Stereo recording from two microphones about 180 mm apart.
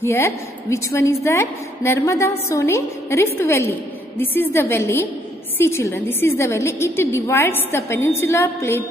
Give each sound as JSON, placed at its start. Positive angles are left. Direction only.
{"t": 0.0, "sound": "a woman's voice", "side_deg": 15}